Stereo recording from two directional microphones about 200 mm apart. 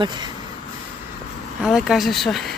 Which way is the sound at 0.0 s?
20° right (ahead or behind).